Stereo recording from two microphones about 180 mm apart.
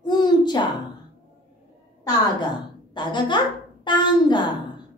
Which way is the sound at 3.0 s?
25° left (ahead or behind).